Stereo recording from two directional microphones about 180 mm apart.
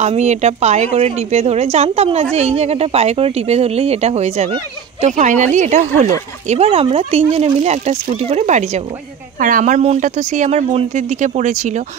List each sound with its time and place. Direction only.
0.0 s speech: 40° right (ahead or behind)